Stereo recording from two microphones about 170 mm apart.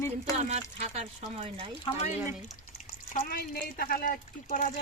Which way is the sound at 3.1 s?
55° left (ahead or behind).